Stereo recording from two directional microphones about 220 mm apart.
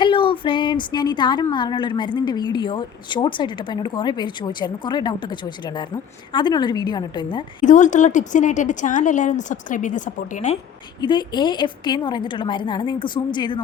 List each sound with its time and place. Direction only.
0.0 s speech: 25° left (ahead or behind)
7.6 s a woman's voice: 35° left (ahead or behind)
11.0 s speech: 20° left (ahead or behind)